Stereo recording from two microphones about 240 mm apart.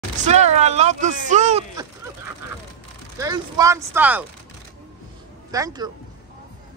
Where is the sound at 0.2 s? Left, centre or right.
Right.